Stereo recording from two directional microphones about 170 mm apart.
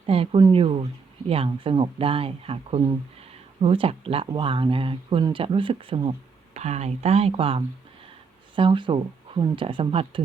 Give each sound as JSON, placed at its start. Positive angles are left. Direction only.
{"t": 0.0, "sound": "speech", "side_deg": -35}